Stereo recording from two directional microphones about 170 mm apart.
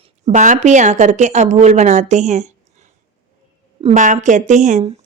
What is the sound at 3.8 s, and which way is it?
A woman's voice, 45° right (ahead or behind).